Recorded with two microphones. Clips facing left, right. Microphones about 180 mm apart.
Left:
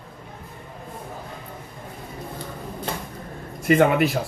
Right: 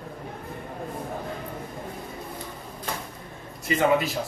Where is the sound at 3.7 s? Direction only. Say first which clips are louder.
Left 5 dB; 55° left (ahead or behind).